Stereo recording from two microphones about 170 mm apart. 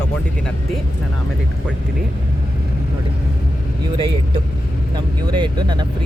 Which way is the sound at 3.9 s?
30° right (ahead or behind).